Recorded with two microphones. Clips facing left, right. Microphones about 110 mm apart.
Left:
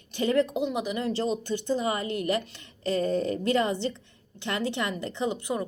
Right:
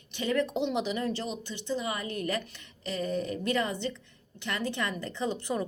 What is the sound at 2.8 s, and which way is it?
A woman's voice, 40° left (ahead or behind).